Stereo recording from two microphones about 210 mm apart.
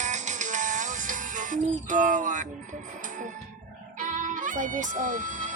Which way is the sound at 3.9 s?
35° right (ahead or behind).